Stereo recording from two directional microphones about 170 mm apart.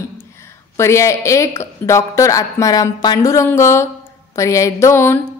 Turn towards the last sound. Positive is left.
turn(degrees=15)  # may be behind; listen again after turning